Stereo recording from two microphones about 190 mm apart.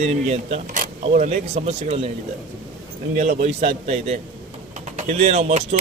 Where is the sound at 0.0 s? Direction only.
35° right (ahead or behind).